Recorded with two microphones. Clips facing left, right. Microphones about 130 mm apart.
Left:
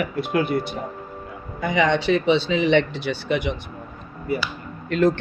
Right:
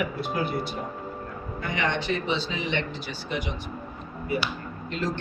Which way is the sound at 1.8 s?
90° left.